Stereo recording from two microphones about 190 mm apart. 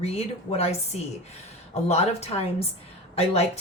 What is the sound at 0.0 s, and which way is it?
Speech, 35° left (ahead or behind).